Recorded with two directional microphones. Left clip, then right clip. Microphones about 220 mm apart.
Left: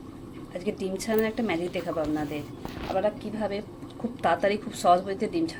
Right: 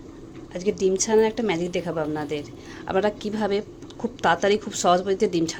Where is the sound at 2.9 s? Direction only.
35° right (ahead or behind).